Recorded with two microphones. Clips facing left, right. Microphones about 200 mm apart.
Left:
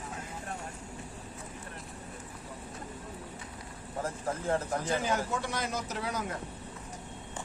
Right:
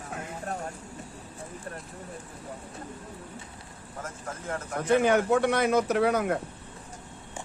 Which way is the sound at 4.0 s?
30° left (ahead or behind).